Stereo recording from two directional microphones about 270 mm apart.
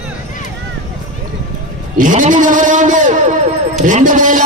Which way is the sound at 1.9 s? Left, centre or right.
Right.